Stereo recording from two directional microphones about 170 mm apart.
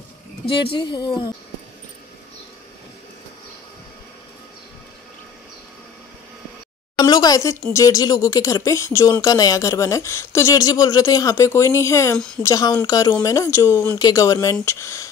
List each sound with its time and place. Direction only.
0.7 s speech: 25° left (ahead or behind)
7.0 s a sound: 25° left (ahead or behind)
7.7 s speech: 20° left (ahead or behind)